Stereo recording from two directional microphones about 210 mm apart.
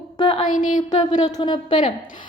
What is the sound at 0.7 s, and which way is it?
Speech, 35° left (ahead or behind).